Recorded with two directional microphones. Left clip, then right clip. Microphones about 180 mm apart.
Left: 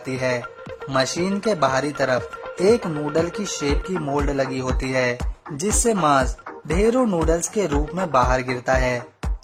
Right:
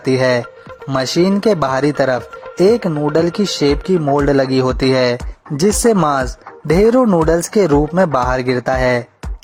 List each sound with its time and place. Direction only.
0.0 s speech: 35° right (ahead or behind)